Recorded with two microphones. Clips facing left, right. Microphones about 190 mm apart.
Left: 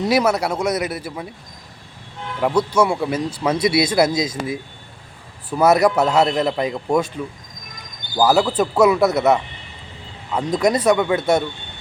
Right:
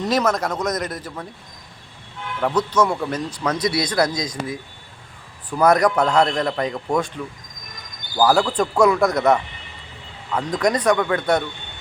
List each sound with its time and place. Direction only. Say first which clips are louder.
0.0 s speech: left 3 dB; 10° left (ahead or behind)
2.4 s speech: left 2 dB; 10° left (ahead or behind)